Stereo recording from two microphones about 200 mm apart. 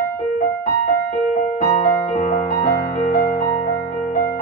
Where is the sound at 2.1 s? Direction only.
45° left (ahead or behind).